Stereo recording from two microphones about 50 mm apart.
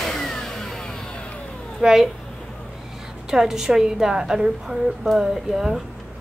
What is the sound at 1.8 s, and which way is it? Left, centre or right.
Speech, centre.